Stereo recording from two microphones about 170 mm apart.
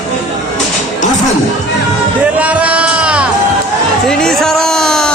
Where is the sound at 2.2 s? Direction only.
10° right (ahead or behind).